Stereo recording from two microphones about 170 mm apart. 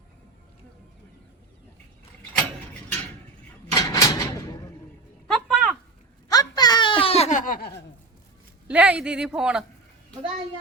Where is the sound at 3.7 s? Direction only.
20° left (ahead or behind).